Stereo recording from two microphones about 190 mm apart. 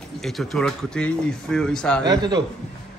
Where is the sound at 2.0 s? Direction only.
20° right (ahead or behind).